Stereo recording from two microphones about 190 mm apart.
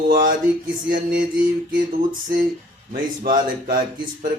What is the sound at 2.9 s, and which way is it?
Speech, 50° right (ahead or behind).